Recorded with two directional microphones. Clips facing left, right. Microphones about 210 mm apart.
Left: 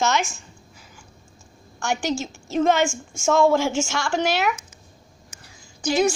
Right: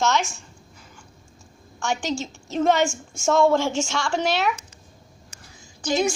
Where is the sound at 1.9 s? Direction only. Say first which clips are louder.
Left 1 dB; 10° left (ahead or behind).